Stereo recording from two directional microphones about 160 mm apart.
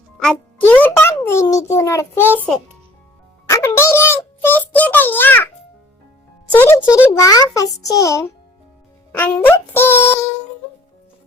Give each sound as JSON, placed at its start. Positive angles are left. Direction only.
{"t": 0.7, "sound": "music", "side_deg": 15}
{"t": 1.2, "sound": "a child's voice", "side_deg": 15}
{"t": 3.5, "sound": "a sound", "side_deg": 20}
{"t": 6.5, "sound": "a child's voice", "side_deg": 10}